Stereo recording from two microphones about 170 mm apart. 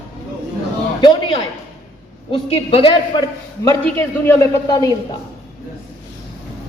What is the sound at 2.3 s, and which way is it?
Speech, 35° left (ahead or behind).